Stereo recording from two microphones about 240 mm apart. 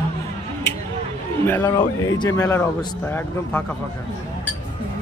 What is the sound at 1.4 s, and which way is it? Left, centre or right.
Speech, centre.